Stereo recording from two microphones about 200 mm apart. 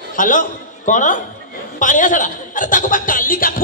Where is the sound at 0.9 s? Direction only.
40° left (ahead or behind).